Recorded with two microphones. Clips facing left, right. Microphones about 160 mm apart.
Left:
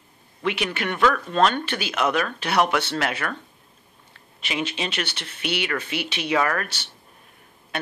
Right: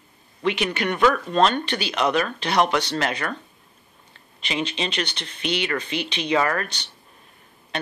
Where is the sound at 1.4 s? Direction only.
5° left (ahead or behind).